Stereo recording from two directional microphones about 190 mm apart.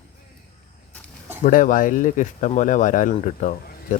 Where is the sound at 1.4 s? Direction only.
45° left (ahead or behind).